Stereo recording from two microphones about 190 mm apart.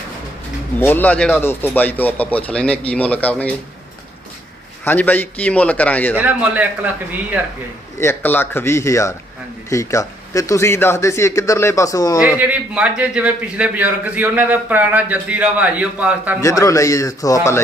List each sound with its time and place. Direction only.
0.8 s speech: 10° left (ahead or behind)
4.9 s speech: 10° left (ahead or behind)
6.1 s a man's voice: 10° right (ahead or behind)
7.9 s speech: 10° left (ahead or behind)
12.4 s a man's voice: 5° right (ahead or behind)
16.4 s speech: 15° left (ahead or behind)